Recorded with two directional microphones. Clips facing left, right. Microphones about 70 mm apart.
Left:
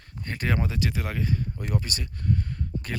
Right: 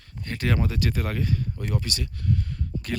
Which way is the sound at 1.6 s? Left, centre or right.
Left.